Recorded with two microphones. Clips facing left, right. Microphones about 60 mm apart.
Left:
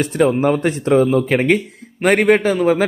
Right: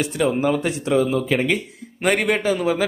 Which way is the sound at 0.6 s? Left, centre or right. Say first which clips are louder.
Left 6 dB; left.